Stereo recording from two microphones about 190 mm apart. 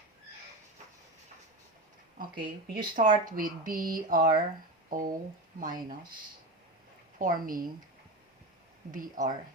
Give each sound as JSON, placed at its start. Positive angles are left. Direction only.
{"t": 2.3, "sound": "speech", "side_deg": -25}
{"t": 2.9, "sound": "speech", "side_deg": -45}
{"t": 7.2, "sound": "speech", "side_deg": -45}
{"t": 8.9, "sound": "speech", "side_deg": -40}